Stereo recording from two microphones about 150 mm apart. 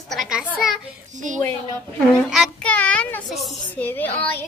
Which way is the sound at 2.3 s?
5° left (ahead or behind).